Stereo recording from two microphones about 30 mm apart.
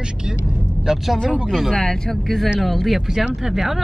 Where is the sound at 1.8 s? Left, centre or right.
Centre.